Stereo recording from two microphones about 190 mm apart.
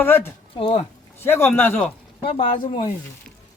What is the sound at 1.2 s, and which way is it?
Speech, 10° left (ahead or behind).